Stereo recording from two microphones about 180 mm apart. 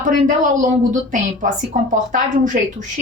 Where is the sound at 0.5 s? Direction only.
45° right (ahead or behind).